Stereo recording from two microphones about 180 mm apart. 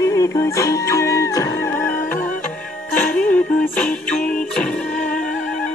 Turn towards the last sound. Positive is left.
turn(degrees=5)  # may be behind; listen again after turning